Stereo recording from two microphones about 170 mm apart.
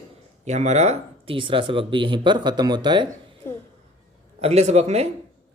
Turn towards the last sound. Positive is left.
turn(degrees=-40)  # may be behind; listen again after turning